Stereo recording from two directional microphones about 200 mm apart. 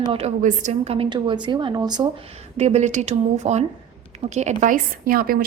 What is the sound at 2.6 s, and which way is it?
A woman's voice, 35° right (ahead or behind).